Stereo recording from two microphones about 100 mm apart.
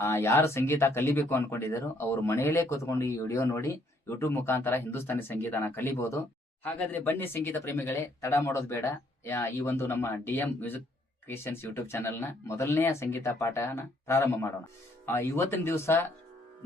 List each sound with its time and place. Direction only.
0.0 s speech: 30° left (ahead or behind)
6.7 s speech: 20° left (ahead or behind)